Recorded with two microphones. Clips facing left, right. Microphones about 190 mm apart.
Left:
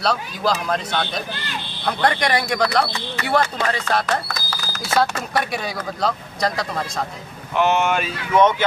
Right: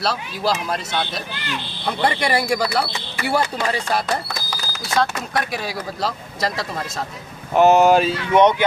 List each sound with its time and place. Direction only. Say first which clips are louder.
0.0 s speech: left 1 dB; 5° right (ahead or behind)
4.9 s speech: left 1 dB; centre (ahead or behind)
7.5 s speech: right 6 dB; 40° right (ahead or behind)
8.4 s speech: right 1 dB; 15° right (ahead or behind)